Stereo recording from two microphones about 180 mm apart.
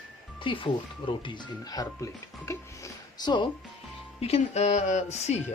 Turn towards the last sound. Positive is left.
turn(degrees=40)  # may be behind; listen again after turning